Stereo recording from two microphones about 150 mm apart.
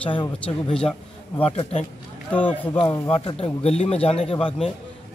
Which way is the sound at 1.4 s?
45° left (ahead or behind).